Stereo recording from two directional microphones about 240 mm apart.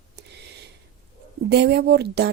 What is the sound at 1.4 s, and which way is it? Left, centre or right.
Speech, right.